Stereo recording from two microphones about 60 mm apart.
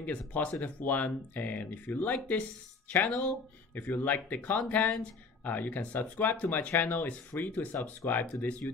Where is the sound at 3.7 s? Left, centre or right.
Left.